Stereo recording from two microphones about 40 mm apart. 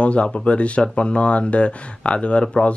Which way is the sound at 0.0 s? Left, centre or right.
Left.